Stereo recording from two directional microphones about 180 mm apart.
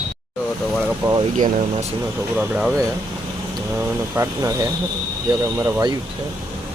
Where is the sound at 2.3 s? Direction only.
5° right (ahead or behind).